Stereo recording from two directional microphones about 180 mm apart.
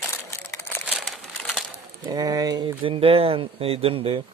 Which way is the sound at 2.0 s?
20° right (ahead or behind).